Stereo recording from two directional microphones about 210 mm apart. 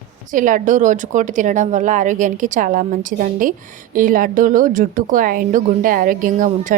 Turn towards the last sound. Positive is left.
turn(degrees=-40)  # may be behind; listen again after turning